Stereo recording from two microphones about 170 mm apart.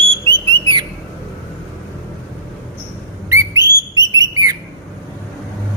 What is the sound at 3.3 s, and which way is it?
Whistle, 20° right (ahead or behind).